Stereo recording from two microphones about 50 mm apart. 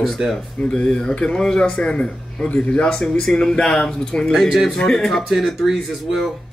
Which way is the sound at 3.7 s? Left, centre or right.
Centre.